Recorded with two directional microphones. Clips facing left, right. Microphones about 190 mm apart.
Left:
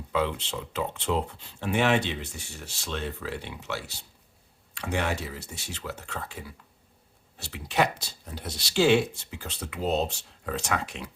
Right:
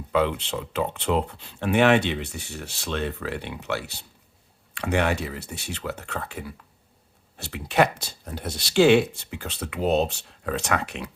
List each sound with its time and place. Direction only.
0.1 s speech: 60° right (ahead or behind)